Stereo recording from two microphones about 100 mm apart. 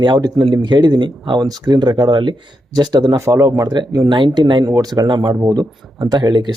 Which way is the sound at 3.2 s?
30° right (ahead or behind).